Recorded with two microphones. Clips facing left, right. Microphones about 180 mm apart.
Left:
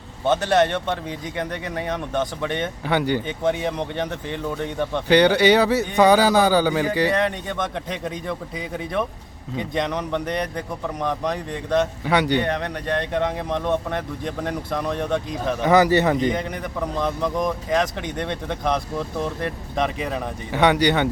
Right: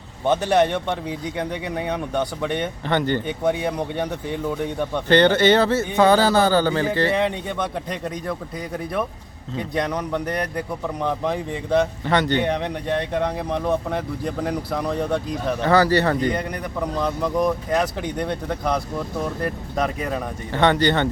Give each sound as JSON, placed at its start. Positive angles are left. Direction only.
{"t": 0.3, "sound": "speech", "side_deg": -15}
{"t": 2.8, "sound": "speech", "side_deg": 10}
{"t": 3.2, "sound": "speech", "side_deg": -5}
{"t": 5.0, "sound": "speech", "side_deg": 10}
{"t": 7.1, "sound": "speech", "side_deg": -10}
{"t": 8.0, "sound": "speech", "side_deg": 0}
{"t": 12.0, "sound": "speech", "side_deg": 10}
{"t": 12.4, "sound": "speech", "side_deg": -15}
{"t": 15.6, "sound": "speech", "side_deg": 15}
{"t": 16.3, "sound": "speech", "side_deg": 0}
{"t": 20.5, "sound": "speech", "side_deg": 10}